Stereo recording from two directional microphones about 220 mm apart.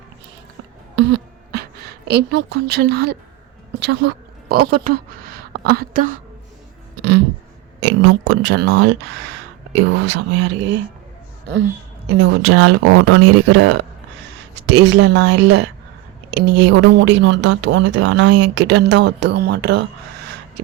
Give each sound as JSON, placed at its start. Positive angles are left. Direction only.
{"t": 0.9, "sound": "beatboxing", "side_deg": -55}
{"t": 2.0, "sound": "a woman's voice", "side_deg": -50}
{"t": 7.8, "sound": "speech", "side_deg": -55}
{"t": 12.1, "sound": "speech", "side_deg": -55}